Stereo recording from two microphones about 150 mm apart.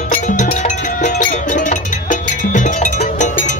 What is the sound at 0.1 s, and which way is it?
Music, 60° left (ahead or behind).